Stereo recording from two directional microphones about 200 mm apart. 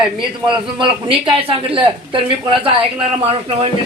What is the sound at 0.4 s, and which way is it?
Speech, 25° right (ahead or behind).